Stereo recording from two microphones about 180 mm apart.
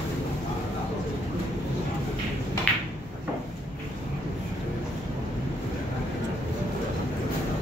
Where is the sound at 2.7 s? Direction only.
5° left (ahead or behind).